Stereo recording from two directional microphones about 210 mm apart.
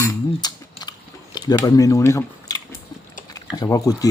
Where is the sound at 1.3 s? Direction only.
15° left (ahead or behind).